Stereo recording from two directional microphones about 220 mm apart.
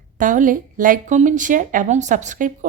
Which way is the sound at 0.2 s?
35° right (ahead or behind).